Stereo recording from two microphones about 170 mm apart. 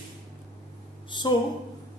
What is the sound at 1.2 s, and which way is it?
Speech, 25° left (ahead or behind).